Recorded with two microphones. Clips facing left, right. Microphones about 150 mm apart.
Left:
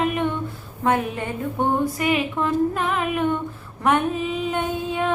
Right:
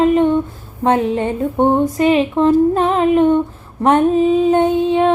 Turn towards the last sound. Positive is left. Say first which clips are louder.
# right 11 dB
turn(degrees=-25)  # may be behind; listen again after turning